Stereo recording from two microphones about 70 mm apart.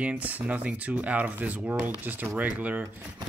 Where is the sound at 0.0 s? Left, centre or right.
Right.